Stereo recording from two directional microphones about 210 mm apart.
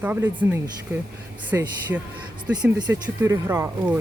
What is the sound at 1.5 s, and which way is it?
Speech, 10° right (ahead or behind).